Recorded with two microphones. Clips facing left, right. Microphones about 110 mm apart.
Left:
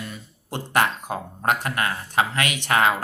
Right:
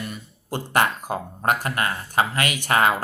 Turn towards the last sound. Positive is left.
turn(degrees=0)  # may be behind; listen again after turning